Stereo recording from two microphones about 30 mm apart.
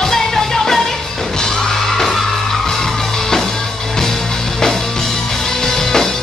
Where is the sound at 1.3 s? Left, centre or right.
Centre.